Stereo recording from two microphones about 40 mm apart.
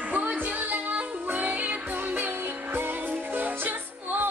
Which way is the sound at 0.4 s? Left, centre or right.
Right.